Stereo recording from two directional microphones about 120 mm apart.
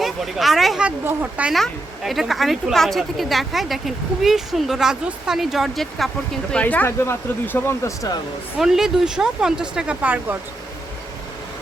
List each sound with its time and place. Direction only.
0.0 s speech: centre (ahead or behind)
1.5 s speech: centre (ahead or behind)
6.5 s speech: 10° left (ahead or behind)
8.5 s speech: 5° right (ahead or behind)